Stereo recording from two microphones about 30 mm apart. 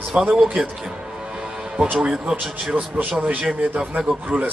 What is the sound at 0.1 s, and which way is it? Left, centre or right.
Speech, right.